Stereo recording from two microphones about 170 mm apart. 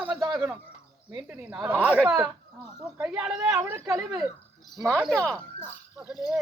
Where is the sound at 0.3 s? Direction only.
5° right (ahead or behind).